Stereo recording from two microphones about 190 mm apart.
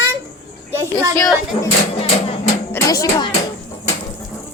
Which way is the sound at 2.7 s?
20° left (ahead or behind).